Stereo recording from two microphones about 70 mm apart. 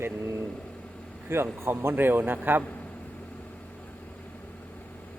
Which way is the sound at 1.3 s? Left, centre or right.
Right.